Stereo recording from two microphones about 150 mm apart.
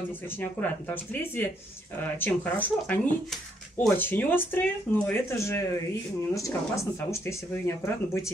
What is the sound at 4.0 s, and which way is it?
Speech, 15° left (ahead or behind).